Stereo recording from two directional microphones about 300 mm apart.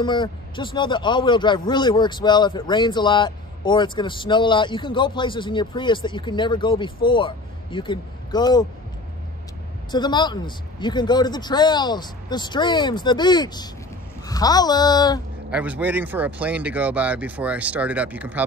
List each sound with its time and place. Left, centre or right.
0.0 s a man's voice: centre
9.8 s a man's voice: centre
15.5 s speech: centre